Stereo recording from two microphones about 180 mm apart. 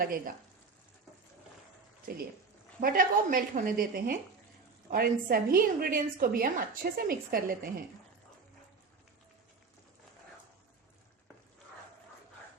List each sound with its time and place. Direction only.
2.8 s a woman's voice: 50° right (ahead or behind)